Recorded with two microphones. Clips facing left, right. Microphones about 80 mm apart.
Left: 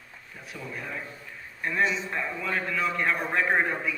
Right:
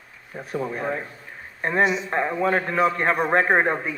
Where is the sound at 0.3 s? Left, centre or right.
Right.